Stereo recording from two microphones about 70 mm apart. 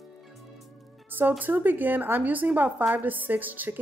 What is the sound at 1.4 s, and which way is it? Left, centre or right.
A woman's voice, right.